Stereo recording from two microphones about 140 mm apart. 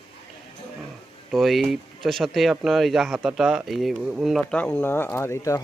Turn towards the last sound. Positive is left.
turn(degrees=20)  # may be behind; listen again after turning